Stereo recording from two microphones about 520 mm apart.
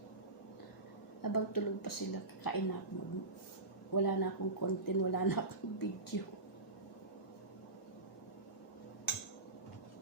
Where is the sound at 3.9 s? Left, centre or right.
Left.